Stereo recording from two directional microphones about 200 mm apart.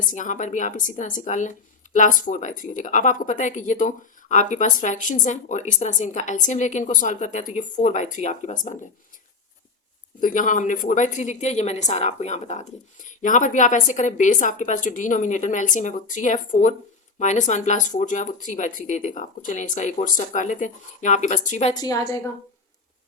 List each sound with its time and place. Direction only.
0.1 s speech: 40° left (ahead or behind)
10.2 s speech: 40° left (ahead or behind)
21.8 s a woman's voice: 20° left (ahead or behind)